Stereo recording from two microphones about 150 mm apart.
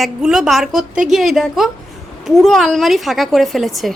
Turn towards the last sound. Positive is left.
turn(degrees=0)  # may be behind; listen again after turning